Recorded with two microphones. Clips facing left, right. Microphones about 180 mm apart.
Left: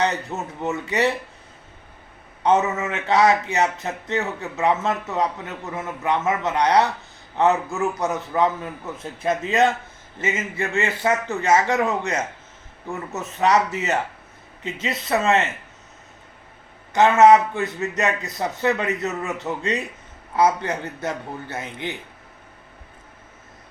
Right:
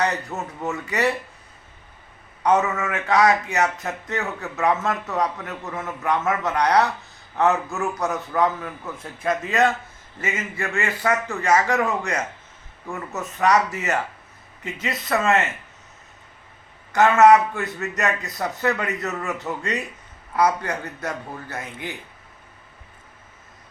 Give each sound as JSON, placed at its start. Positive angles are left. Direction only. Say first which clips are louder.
{"t": 0.0, "sound": "speech", "louder": "left 1 dB", "side_deg": 20}
{"t": 2.4, "sound": "speech", "louder": "left 1 dB", "side_deg": 20}
{"t": 16.9, "sound": "speech", "louder": "left 1 dB", "side_deg": 20}